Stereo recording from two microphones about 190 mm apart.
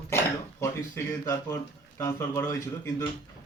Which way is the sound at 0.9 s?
15° left (ahead or behind).